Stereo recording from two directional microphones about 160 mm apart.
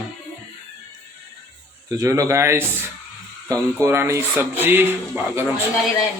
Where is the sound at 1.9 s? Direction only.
20° right (ahead or behind).